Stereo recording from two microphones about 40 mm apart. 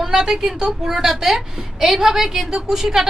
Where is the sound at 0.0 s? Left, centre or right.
Centre.